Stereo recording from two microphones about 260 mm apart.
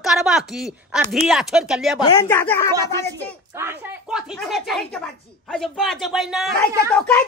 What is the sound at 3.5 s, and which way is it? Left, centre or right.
Speech, centre.